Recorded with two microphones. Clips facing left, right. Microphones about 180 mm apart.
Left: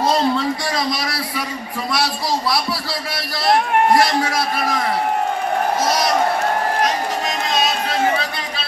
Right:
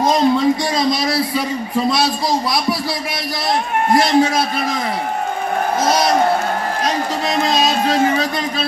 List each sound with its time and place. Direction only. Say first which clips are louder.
0.0 s a sound: right 4 dB; 20° right (ahead or behind)
3.9 s a man's voice: right 3 dB; 25° right (ahead or behind)
7.4 s speech: right 5 dB; 35° right (ahead or behind)